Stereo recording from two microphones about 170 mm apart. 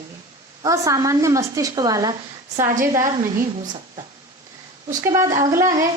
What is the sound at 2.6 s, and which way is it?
Speech, 50° right (ahead or behind).